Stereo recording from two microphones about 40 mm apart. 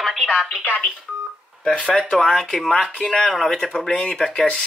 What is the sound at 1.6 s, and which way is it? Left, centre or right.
Speech, left.